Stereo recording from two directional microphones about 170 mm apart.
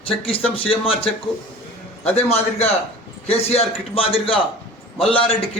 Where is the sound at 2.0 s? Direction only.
40° left (ahead or behind).